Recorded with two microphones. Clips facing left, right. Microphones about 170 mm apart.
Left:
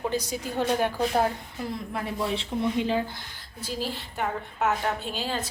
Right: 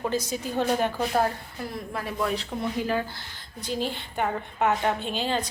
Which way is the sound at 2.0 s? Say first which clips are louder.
Right 2 dB; 25° left (ahead or behind).